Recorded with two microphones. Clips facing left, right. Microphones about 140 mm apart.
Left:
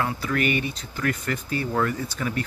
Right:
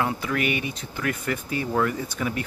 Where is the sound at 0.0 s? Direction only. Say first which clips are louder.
Even; 15° right (ahead or behind).